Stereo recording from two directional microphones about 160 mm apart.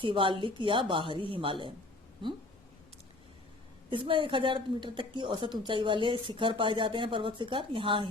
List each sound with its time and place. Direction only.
0.0 s a woman's voice: 30° right (ahead or behind)
3.8 s a woman's voice: 30° right (ahead or behind)